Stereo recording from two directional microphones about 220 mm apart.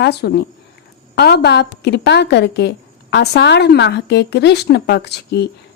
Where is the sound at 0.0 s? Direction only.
50° left (ahead or behind).